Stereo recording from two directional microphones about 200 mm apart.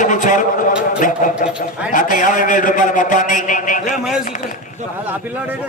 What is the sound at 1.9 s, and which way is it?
A man's voice, 40° left (ahead or behind).